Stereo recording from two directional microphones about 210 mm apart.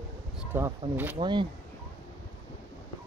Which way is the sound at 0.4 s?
10° right (ahead or behind).